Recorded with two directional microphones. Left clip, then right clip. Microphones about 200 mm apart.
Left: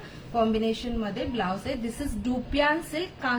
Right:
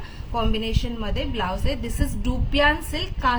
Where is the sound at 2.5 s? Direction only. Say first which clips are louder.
Right 5 dB; 60° right (ahead or behind).